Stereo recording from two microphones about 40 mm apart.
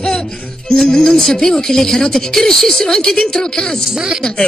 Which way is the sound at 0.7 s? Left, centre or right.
Centre.